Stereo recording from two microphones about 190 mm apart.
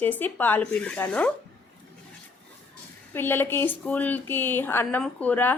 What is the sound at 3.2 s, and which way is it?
A woman's voice, 10° left (ahead or behind).